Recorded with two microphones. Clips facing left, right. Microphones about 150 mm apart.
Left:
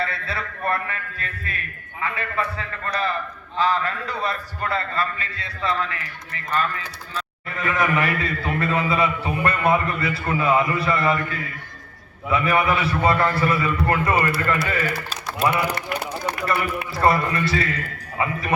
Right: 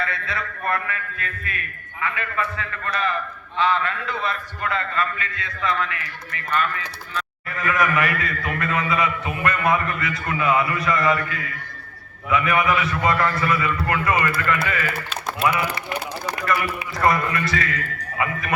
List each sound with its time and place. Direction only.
0.0 s a man's voice: 30° left (ahead or behind)
15.7 s run: 60° left (ahead or behind)
17.0 s a man's voice: 30° left (ahead or behind)